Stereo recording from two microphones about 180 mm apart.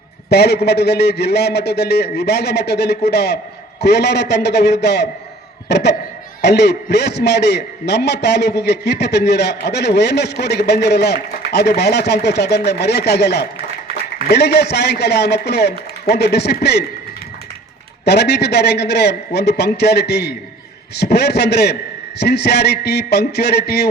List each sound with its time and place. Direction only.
0.3 s a man's voice: 65° left (ahead or behind)
18.0 s a man's voice: 65° left (ahead or behind)